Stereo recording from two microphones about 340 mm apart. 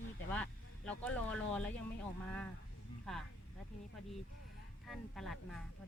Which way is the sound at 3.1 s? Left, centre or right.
Centre.